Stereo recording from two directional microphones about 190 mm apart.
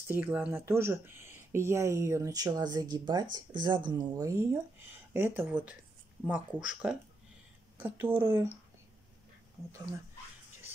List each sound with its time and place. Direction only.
0.1 s speech: 10° right (ahead or behind)